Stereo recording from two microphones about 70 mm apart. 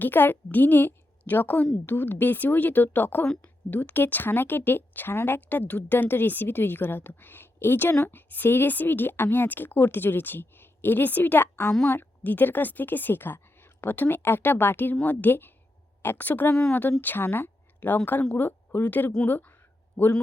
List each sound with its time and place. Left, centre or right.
0.0 s a woman's voice: left